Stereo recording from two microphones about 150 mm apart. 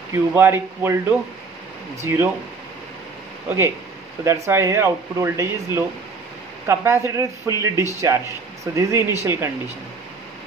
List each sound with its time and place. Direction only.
0.3 s speech: 15° right (ahead or behind)
2.0 s speech: 15° right (ahead or behind)
3.4 s speech: 15° right (ahead or behind)